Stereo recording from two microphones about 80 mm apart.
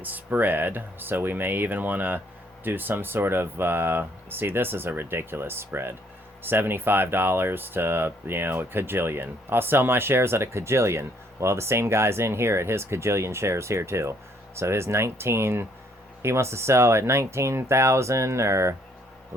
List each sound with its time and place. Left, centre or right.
0.0 s speech: right